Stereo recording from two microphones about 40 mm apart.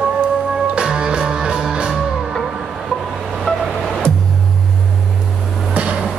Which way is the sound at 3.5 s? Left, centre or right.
Left.